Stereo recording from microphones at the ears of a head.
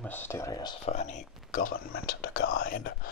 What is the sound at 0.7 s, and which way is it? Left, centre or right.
Speech, left.